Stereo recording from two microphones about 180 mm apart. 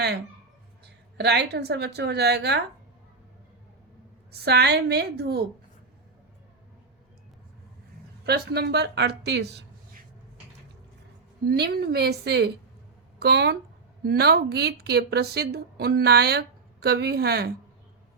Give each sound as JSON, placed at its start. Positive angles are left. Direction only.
{"t": 1.2, "sound": "speech", "side_deg": -65}
{"t": 4.3, "sound": "speech", "side_deg": -65}
{"t": 8.3, "sound": "speech", "side_deg": -65}
{"t": 11.4, "sound": "speech", "side_deg": -65}